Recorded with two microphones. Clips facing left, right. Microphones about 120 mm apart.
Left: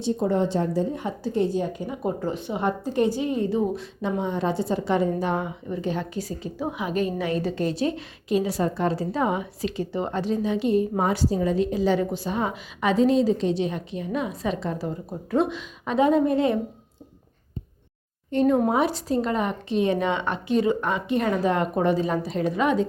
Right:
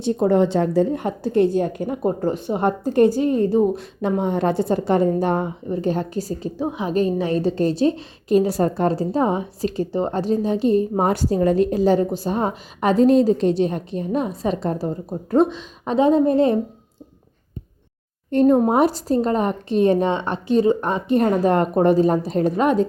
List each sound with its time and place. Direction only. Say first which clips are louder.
0.0 s a woman's voice: right 6 dB; 70° right (ahead or behind)
2.0 s a woman's voice: right 5 dB; 40° right (ahead or behind)
8.3 s speech: right 6 dB; 45° right (ahead or behind)
11.0 s a woman's voice: right 5 dB; 50° right (ahead or behind); by 16.6 s 35° right (ahead or behind)
18.3 s speech: right 5 dB; 45° right (ahead or behind)